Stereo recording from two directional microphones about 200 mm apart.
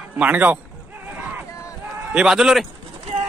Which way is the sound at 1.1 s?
10° right (ahead or behind).